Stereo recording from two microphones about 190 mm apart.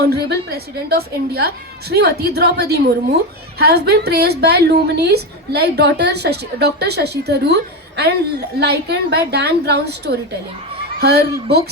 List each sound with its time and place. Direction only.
0.0 s a woman's voice: 55° right (ahead or behind)